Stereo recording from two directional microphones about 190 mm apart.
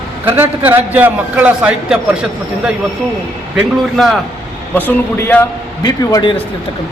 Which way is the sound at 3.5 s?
Centre (ahead or behind).